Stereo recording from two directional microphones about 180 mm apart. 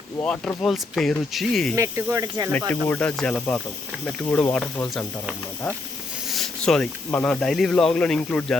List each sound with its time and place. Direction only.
0.2 s speech: 5° left (ahead or behind)
1.7 s speech: 15° right (ahead or behind)
2.5 s speech: 10° left (ahead or behind)